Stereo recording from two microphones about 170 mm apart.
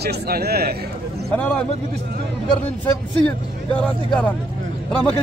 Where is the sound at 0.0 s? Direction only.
70° right (ahead or behind).